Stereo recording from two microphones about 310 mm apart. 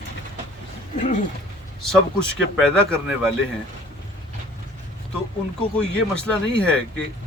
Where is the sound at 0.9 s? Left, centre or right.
Left.